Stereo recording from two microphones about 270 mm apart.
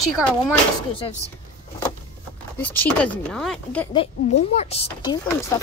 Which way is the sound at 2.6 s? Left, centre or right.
Centre.